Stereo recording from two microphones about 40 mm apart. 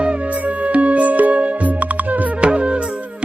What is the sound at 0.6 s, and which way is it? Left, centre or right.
Music, right.